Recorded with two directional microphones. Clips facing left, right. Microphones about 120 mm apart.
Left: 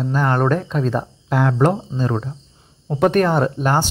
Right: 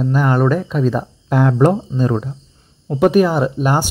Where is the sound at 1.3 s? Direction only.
15° right (ahead or behind).